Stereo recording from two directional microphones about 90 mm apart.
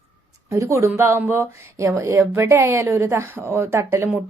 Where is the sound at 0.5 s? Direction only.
35° right (ahead or behind).